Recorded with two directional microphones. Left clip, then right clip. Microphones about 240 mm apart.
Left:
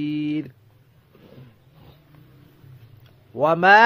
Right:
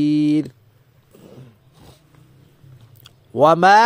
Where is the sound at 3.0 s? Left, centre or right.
Right.